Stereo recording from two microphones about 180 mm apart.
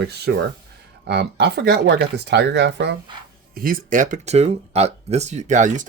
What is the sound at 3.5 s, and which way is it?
Speech, 55° right (ahead or behind).